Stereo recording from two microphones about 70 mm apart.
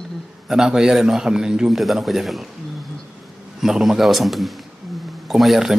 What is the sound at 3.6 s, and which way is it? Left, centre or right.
A man's voice, centre.